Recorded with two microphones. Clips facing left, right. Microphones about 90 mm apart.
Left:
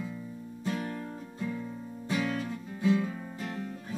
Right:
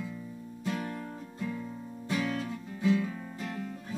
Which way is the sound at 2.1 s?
15° left (ahead or behind).